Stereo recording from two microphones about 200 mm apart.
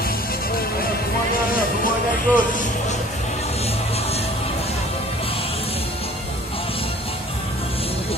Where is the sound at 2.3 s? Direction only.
40° left (ahead or behind).